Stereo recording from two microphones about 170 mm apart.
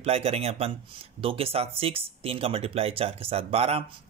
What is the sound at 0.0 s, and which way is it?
Speech, 35° right (ahead or behind).